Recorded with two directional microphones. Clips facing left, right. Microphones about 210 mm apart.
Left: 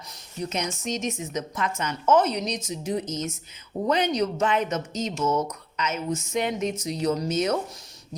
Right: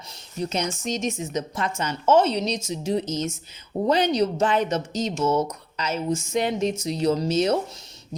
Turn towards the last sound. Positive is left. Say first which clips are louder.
# right 3 dB
turn(degrees=-30)  # may be behind; listen again after turning